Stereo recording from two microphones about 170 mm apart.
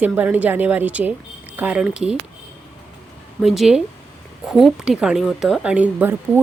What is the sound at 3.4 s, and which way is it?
A woman's voice, centre (ahead or behind).